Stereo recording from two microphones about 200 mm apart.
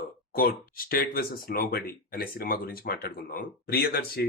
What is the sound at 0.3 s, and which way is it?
Speech, 45° left (ahead or behind).